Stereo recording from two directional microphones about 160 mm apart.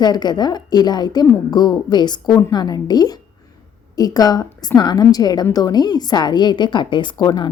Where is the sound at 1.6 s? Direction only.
25° left (ahead or behind).